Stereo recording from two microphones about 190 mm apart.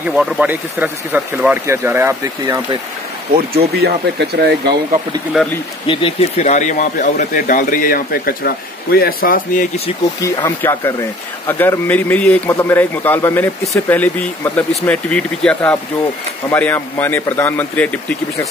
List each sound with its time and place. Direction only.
0.0 s speech: 5° right (ahead or behind)
3.5 s speech: 60° right (ahead or behind)
5.9 s speech: 30° left (ahead or behind)
10.2 s speech: 15° left (ahead or behind)